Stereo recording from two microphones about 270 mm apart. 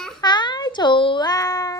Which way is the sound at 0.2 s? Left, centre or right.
Centre.